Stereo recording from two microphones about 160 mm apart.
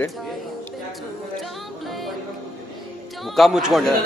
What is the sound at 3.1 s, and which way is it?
Speech, centre (ahead or behind).